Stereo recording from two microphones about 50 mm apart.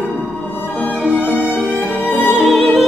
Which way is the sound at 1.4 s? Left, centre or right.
Centre.